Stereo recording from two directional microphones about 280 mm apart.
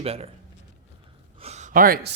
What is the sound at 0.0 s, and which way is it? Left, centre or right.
Speech, right.